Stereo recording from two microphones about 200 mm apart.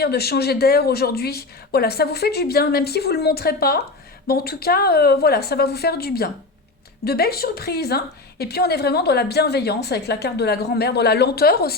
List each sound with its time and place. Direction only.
0.0 s a woman's voice: 55° left (ahead or behind)